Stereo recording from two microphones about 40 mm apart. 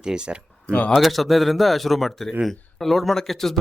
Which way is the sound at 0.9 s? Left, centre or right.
Centre.